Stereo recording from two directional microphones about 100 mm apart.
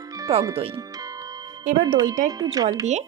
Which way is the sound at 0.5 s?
75° right (ahead or behind).